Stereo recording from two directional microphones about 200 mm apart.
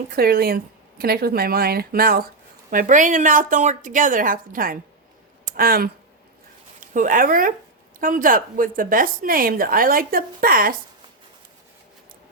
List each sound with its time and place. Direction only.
0.1 s a woman's voice: 50° right (ahead or behind)